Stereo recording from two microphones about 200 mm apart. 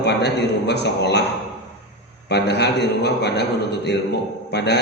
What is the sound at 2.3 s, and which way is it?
A man's voice, 55° left (ahead or behind).